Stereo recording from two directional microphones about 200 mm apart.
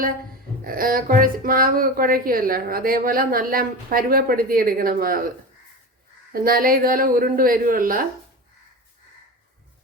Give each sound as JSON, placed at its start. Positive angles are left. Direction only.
{"t": 0.6, "sound": "speech", "side_deg": -45}
{"t": 6.3, "sound": "speech", "side_deg": -45}